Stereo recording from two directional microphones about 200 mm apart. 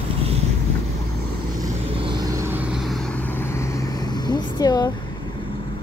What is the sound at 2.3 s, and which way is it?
Vehicle, 15° right (ahead or behind).